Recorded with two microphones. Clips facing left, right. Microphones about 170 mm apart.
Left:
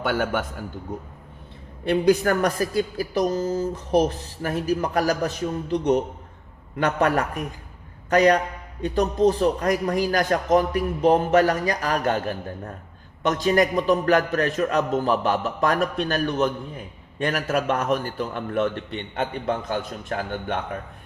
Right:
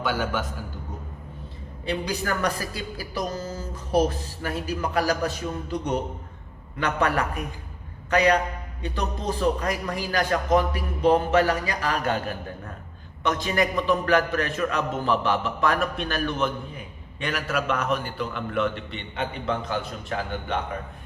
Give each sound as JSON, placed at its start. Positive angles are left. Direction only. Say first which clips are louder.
{"t": 0.0, "sound": "a man's voice", "louder": "left 3 dB", "side_deg": 55}
{"t": 1.8, "sound": "a man's voice", "louder": "left 9 dB", "side_deg": 50}
{"t": 6.7, "sound": "a man's voice", "louder": "left 3 dB", "side_deg": 45}